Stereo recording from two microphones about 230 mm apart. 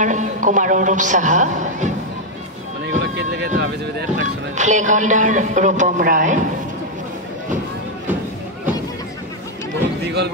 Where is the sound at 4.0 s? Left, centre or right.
Right.